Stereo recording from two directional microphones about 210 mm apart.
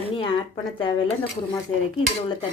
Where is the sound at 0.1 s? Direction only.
25° left (ahead or behind).